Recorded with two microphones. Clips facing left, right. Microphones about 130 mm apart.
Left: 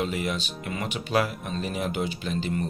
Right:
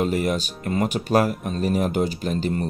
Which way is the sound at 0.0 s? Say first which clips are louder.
Right 6 dB; 45° right (ahead or behind).